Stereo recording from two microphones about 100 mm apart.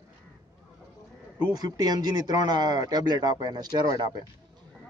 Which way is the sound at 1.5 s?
40° right (ahead or behind).